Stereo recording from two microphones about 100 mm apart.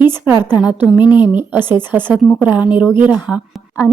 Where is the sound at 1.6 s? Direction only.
50° left (ahead or behind).